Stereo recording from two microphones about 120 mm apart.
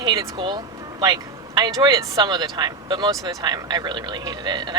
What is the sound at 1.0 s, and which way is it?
Vehicle, 35° right (ahead or behind).